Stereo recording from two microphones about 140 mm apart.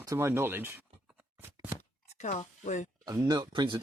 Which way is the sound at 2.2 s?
55° left (ahead or behind).